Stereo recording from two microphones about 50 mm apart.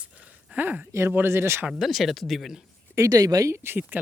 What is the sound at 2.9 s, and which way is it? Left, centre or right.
Speech, right.